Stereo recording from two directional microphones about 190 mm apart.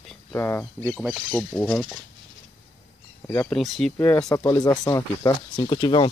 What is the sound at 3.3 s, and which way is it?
Speech, 10° left (ahead or behind).